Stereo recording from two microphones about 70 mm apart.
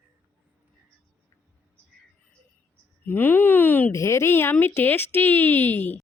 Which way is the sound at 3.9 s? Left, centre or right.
Left.